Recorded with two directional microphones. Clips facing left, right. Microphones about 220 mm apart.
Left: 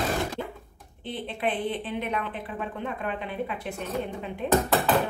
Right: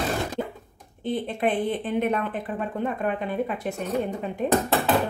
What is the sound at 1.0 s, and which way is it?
Speech, 45° right (ahead or behind).